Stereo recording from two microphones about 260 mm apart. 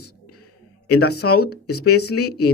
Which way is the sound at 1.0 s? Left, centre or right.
Left.